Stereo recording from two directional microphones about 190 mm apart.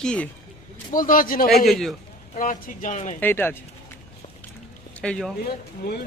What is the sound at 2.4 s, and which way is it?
Speech, 45° left (ahead or behind).